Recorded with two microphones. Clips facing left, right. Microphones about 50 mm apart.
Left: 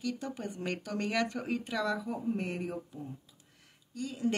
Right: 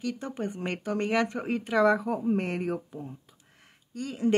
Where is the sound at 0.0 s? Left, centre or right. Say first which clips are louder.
Right 4 dB; right.